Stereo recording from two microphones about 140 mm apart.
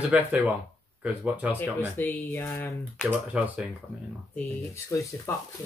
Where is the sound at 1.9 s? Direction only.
15° left (ahead or behind).